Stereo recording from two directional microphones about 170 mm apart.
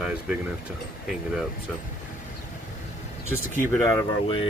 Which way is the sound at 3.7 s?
15° left (ahead or behind).